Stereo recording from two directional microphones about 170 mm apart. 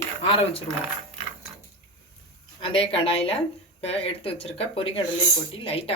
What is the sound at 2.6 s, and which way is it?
Speech, 35° left (ahead or behind).